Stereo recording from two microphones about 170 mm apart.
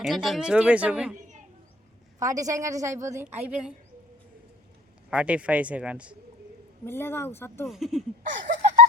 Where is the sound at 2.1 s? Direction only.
20° right (ahead or behind).